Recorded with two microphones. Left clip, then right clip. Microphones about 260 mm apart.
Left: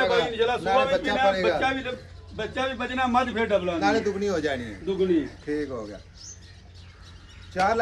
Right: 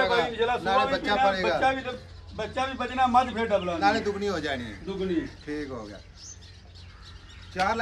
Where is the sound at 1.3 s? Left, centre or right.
Centre.